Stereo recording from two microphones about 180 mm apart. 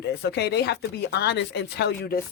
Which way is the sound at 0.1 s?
65° left (ahead or behind).